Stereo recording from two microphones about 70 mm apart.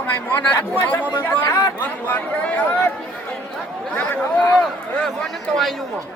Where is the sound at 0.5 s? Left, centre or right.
Left.